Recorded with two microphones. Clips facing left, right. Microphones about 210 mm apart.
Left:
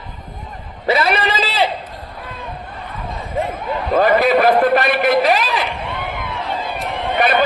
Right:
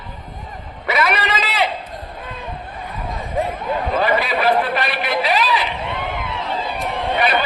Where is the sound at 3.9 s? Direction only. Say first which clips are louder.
Left 8 dB; 45° left (ahead or behind).